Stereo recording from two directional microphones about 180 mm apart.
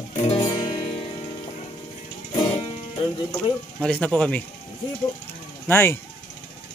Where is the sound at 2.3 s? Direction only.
25° left (ahead or behind).